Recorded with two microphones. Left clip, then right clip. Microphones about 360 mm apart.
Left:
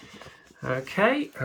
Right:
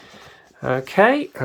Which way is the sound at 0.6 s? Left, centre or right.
Centre.